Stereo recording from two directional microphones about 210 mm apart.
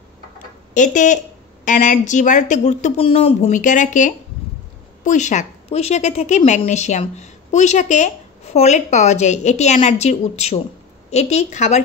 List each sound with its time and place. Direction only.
0.7 s a woman's voice: 35° left (ahead or behind)